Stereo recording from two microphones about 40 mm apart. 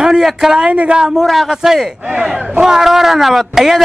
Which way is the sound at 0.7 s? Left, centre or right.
Right.